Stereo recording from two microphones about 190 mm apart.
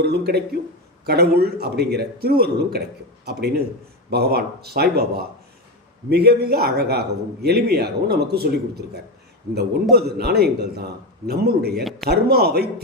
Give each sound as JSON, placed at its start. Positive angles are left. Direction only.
{"t": 0.0, "sound": "a man's voice", "side_deg": -60}
{"t": 9.9, "sound": "a man's voice", "side_deg": -55}
{"t": 11.8, "sound": "a man's voice", "side_deg": 0}
{"t": 12.0, "sound": "a man's voice", "side_deg": -55}